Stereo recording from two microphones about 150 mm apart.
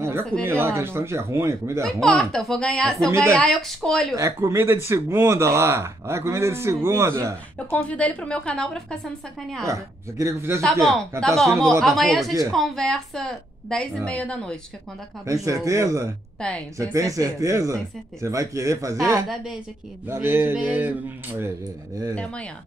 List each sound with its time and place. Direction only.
0.4 s speech: 15° right (ahead or behind)
2.0 s a woman's voice: 5° left (ahead or behind)
3.1 s speech: 20° right (ahead or behind)
3.3 s a woman's voice: 5° left (ahead or behind)
4.1 s speech: 20° right (ahead or behind)
7.5 s a woman's voice: 10° left (ahead or behind)
9.7 s speech: 20° right (ahead or behind)
10.6 s a woman's voice: centre (ahead or behind)
15.2 s speech: 20° right (ahead or behind)
16.3 s speech: 5° left (ahead or behind)
16.7 s speech: 20° right (ahead or behind)
22.1 s a woman's voice: 10° left (ahead or behind)